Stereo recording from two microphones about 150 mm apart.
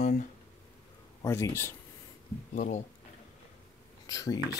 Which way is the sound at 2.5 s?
55° left (ahead or behind).